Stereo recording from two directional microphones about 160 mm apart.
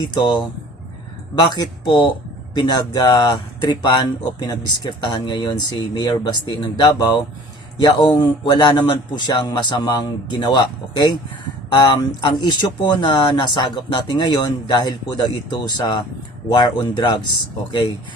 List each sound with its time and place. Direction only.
0.0 s speech: 25° left (ahead or behind)